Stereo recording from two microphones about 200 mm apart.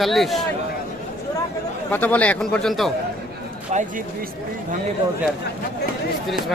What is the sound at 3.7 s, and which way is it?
Speech, 35° right (ahead or behind).